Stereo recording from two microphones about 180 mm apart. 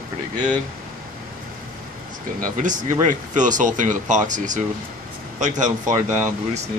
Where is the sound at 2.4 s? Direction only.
45° right (ahead or behind).